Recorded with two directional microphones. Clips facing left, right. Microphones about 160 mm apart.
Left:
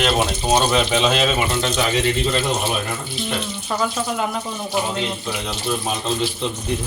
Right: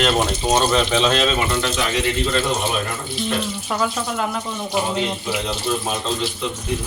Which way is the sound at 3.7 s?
Centre (ahead or behind).